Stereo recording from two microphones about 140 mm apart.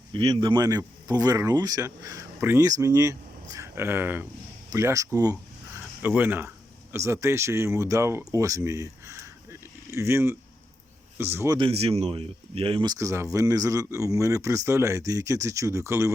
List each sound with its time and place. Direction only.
0.1 s speech: 35° right (ahead or behind)
6.0 s speech: 15° right (ahead or behind)
8.3 s a sound: 20° right (ahead or behind)
11.2 s speech: 15° right (ahead or behind)
11.5 s speech: 40° right (ahead or behind)
12.9 s speech: 20° right (ahead or behind)